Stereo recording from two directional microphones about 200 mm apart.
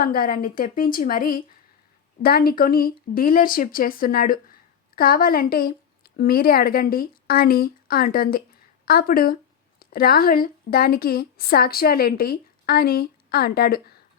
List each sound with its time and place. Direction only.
0.0 s a woman's voice: 45° left (ahead or behind)